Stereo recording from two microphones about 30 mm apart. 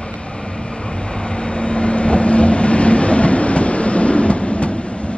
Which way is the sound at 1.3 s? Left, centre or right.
Left.